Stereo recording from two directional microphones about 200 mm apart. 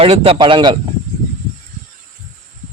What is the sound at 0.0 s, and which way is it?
Speech, 30° right (ahead or behind).